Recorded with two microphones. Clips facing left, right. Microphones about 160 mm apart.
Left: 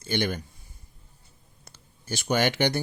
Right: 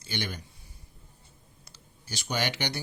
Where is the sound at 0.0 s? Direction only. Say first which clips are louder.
Left 8 dB; 50° left (ahead or behind).